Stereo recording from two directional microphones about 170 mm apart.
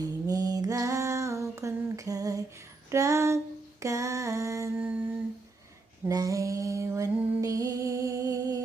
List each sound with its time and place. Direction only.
0.0 s a sound: 20° right (ahead or behind)
2.9 s female singing: 20° right (ahead or behind)
6.1 s female singing: 20° right (ahead or behind)